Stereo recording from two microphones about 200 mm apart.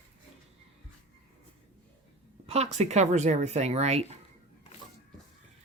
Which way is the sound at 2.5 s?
35° right (ahead or behind).